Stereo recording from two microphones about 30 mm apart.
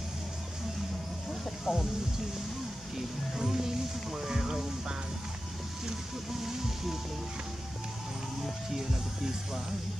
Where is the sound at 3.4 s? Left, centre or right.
Centre.